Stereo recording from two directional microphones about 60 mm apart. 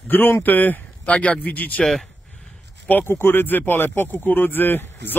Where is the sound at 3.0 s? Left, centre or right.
Left.